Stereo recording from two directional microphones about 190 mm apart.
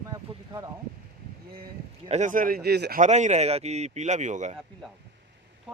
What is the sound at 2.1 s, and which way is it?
Speech, 40° right (ahead or behind).